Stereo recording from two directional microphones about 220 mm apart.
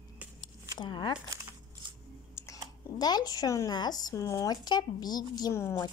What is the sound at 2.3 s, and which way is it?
Speech, 15° left (ahead or behind).